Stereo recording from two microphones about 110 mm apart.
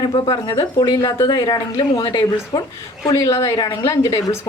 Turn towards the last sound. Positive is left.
turn(degrees=35)  # may be behind; listen again after turning